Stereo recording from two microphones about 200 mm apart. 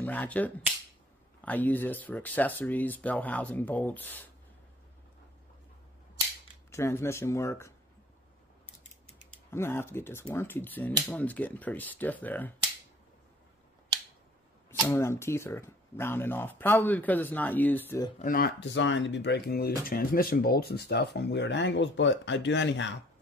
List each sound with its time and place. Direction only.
0.0 s speech: 10° left (ahead or behind)
6.7 s speech: 15° left (ahead or behind)
9.5 s speech: 10° left (ahead or behind)
14.7 s speech: 10° left (ahead or behind)
18.2 s speech: 45° left (ahead or behind)
18.6 s speech: 65° left (ahead or behind)